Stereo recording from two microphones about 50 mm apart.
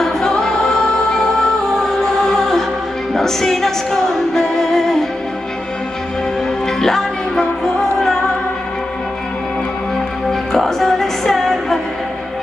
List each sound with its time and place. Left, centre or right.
0.0 s music: centre
1.9 s music: centre
6.8 s music: centre
10.5 s music: centre